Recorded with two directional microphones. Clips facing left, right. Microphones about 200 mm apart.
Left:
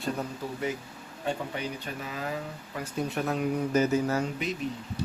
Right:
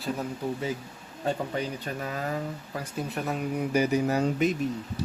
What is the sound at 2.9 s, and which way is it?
Speech, centre (ahead or behind).